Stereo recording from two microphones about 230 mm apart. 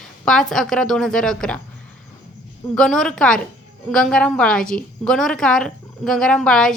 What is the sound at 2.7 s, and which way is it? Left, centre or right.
A woman's voice, centre.